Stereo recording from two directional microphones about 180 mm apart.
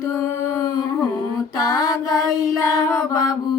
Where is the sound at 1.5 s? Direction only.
20° left (ahead or behind).